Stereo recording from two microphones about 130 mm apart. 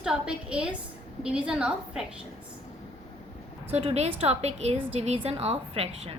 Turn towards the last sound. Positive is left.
turn(degrees=-50)  # may be behind; listen again after turning